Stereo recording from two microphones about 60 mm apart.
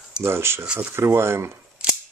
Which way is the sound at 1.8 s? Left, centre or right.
Centre.